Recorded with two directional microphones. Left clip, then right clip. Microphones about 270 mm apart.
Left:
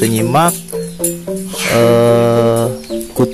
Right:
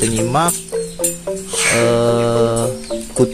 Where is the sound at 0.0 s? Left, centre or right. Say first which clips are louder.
Left 4 dB; centre.